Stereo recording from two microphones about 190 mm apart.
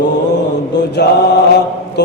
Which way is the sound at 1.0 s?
60° left (ahead or behind).